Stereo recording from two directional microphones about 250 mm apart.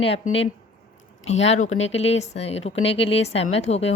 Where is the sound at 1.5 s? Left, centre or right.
Left.